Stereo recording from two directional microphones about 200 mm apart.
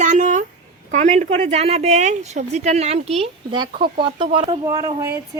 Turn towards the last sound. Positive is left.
turn(degrees=-15)  # may be behind; listen again after turning